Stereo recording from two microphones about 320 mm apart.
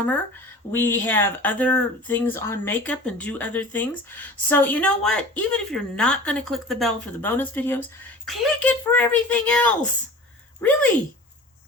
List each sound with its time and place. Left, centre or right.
0.7 s speech: centre